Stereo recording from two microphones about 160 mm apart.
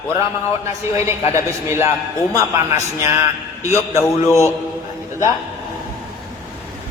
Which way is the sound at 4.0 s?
15° left (ahead or behind).